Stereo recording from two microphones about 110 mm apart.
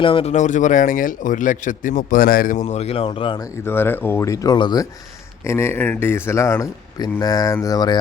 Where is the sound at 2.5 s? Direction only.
85° left; by 3.4 s 55° left (ahead or behind).